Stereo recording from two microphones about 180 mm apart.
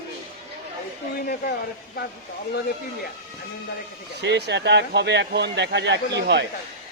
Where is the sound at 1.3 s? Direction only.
55° left (ahead or behind).